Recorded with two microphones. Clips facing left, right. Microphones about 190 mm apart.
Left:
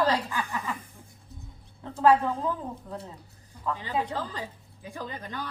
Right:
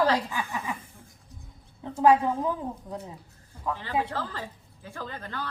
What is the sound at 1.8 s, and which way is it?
Speech, 15° right (ahead or behind).